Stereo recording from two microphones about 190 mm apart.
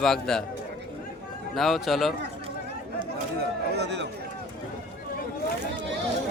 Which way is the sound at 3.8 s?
65° right (ahead or behind).